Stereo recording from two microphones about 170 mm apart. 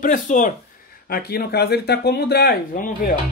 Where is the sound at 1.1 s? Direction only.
70° left (ahead or behind).